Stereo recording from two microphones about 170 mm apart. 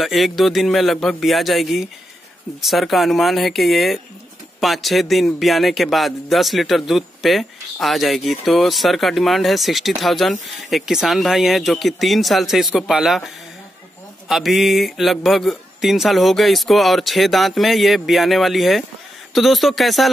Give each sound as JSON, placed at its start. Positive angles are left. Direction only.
{"t": 0.0, "sound": "speech", "side_deg": 0}
{"t": 14.3, "sound": "speech", "side_deg": 0}